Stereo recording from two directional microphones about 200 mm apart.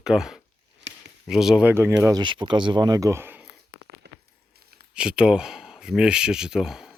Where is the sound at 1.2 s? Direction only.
Centre (ahead or behind).